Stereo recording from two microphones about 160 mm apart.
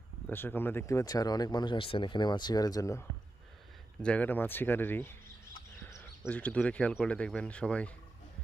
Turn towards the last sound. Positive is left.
turn(degrees=10)  # may be behind; listen again after turning